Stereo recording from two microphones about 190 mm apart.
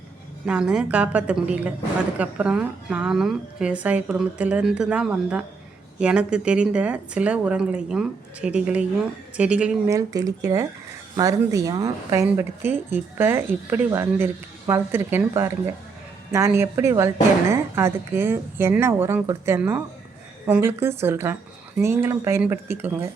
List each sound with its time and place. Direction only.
0.4 s a woman's voice: 5° right (ahead or behind)
9.9 s a woman's voice: 20° right (ahead or behind)